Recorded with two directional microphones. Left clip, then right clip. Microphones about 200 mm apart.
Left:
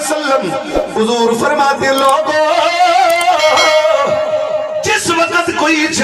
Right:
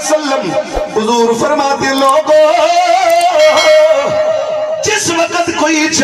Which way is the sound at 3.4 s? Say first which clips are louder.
Right 5 dB; centre (ahead or behind).